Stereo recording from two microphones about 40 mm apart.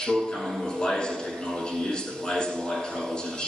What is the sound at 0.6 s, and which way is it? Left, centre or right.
A man's voice, centre.